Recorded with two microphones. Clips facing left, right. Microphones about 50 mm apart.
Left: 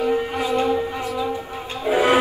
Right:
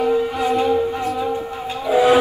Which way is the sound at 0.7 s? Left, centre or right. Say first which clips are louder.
Right 4 dB; right.